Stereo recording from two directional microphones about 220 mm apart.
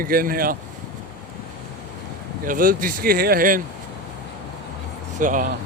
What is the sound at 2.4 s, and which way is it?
Speech, 40° right (ahead or behind).